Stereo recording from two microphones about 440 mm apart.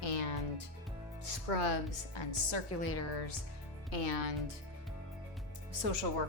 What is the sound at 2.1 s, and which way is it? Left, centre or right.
Speech, left.